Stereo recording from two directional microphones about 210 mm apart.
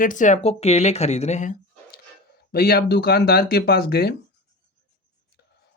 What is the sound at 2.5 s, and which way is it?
Speech, 50° left (ahead or behind).